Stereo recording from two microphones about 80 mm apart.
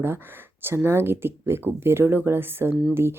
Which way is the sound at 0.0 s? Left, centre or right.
Right.